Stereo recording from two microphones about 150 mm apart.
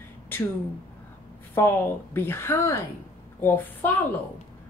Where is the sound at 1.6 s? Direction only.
15° left (ahead or behind).